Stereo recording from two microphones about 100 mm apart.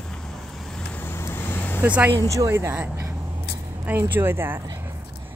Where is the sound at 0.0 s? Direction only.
5° left (ahead or behind).